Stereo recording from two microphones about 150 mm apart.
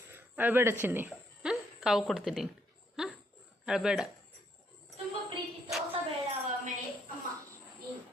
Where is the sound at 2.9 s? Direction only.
5° right (ahead or behind).